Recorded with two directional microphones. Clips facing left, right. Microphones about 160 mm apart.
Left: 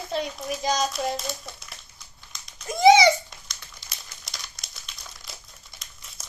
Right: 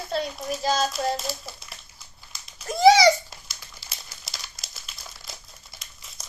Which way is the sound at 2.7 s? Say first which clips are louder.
Even; 20° left (ahead or behind).